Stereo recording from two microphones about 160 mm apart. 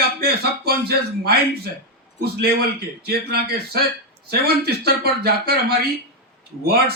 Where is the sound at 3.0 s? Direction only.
80° right.